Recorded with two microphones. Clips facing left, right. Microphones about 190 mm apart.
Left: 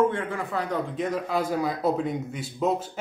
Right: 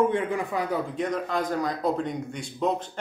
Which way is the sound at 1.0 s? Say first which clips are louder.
Left 1 dB; 5° left (ahead or behind).